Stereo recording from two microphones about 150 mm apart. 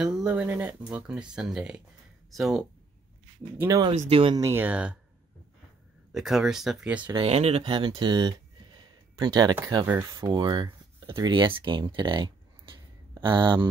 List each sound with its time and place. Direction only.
0.0 s speech: 5° right (ahead or behind)
3.5 s speech: 20° right (ahead or behind)
4.1 s speech: 40° right (ahead or behind)
4.4 s speech: 15° right (ahead or behind)
6.1 s speech: centre (ahead or behind)
7.0 s speech: 30° right (ahead or behind)
7.2 s speech: 45° right (ahead or behind)